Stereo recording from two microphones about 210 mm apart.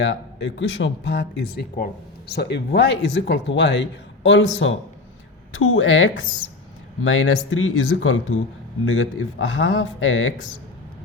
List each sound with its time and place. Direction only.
0.0 s speech: 55° left (ahead or behind)